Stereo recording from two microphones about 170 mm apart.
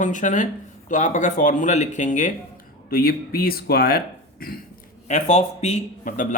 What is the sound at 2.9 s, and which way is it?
Speech, 60° left (ahead or behind).